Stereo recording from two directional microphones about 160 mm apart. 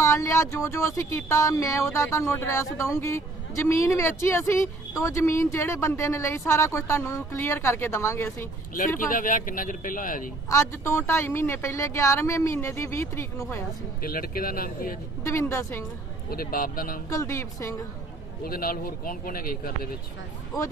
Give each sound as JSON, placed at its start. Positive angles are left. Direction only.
{"t": 0.0, "sound": "a man's voice", "side_deg": 20}
{"t": 9.1, "sound": "a man's voice", "side_deg": 55}
{"t": 10.5, "sound": "a man's voice", "side_deg": 15}
{"t": 14.0, "sound": "a man's voice", "side_deg": 65}
{"t": 15.2, "sound": "a man's voice", "side_deg": 15}
{"t": 16.3, "sound": "a man's voice", "side_deg": 65}
{"t": 17.1, "sound": "speech", "side_deg": 20}
{"t": 18.4, "sound": "a man's voice", "side_deg": 65}